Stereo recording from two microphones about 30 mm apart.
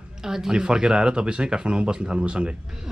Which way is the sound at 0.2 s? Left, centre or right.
Centre.